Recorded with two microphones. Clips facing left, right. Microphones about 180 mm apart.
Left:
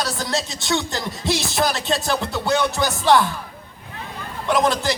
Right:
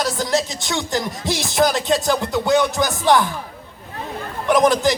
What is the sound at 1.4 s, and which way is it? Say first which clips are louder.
Music: right 8 dB; 20° right (ahead or behind).